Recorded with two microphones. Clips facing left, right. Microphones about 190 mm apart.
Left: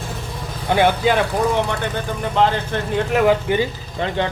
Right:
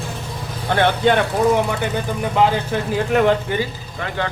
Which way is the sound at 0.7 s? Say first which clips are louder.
Even; 10° left (ahead or behind).